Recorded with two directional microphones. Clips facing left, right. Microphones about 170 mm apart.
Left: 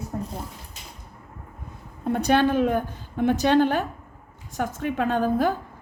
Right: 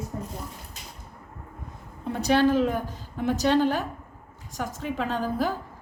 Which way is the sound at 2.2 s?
55° left (ahead or behind).